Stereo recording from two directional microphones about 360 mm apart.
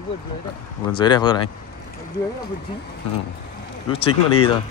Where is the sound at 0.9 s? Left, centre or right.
Centre.